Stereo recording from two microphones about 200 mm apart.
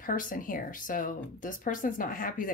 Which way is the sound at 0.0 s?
45° left (ahead or behind).